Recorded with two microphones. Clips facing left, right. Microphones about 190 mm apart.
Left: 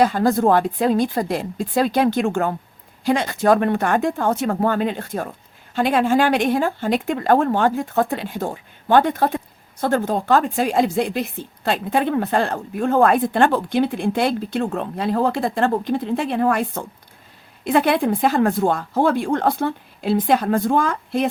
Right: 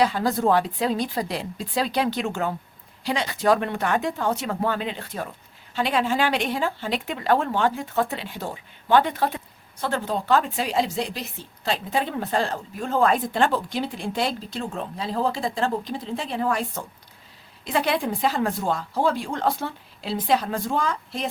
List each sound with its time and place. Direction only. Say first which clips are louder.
0.0 s speech: left 5 dB; 50° left (ahead or behind)